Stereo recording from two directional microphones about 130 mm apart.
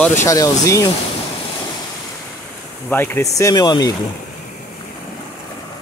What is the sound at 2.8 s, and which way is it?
Speech, 15° left (ahead or behind).